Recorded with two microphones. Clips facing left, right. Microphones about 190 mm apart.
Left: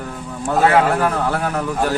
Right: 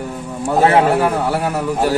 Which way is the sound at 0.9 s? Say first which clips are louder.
Right 3 dB; 10° right (ahead or behind).